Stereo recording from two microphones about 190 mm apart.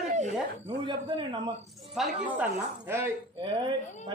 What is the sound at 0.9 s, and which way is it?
Speech, 25° right (ahead or behind).